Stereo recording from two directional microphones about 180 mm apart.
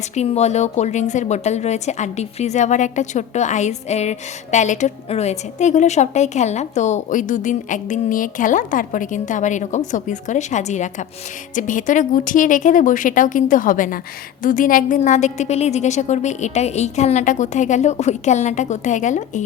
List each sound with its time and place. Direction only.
0.1 s a woman's voice: 35° left (ahead or behind)